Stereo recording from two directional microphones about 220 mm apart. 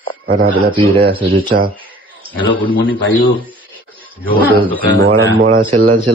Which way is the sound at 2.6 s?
5° left (ahead or behind).